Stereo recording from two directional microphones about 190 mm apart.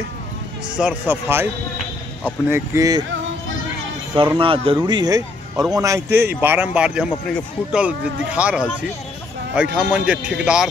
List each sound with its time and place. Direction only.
0.7 s speech: 10° right (ahead or behind)
4.4 s a man's voice: 30° right (ahead or behind); by 10.7 s 5° right (ahead or behind)